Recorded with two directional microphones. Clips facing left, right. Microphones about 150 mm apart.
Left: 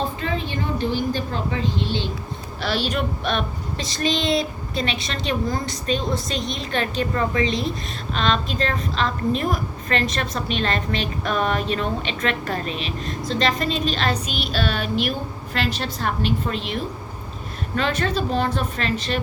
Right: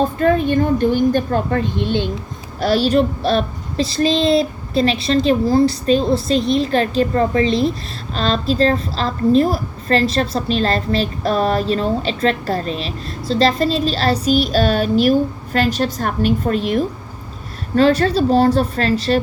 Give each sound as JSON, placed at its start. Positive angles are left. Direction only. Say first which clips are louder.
{"t": 0.2, "sound": "a woman's voice", "louder": "right 12 dB", "side_deg": -50}
{"t": 2.6, "sound": "a woman's voice", "louder": "right 9 dB", "side_deg": -40}